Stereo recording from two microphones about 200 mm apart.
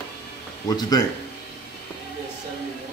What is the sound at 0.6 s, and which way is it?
Speech, 20° left (ahead or behind).